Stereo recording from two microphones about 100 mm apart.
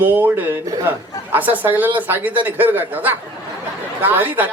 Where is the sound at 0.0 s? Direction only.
20° right (ahead or behind).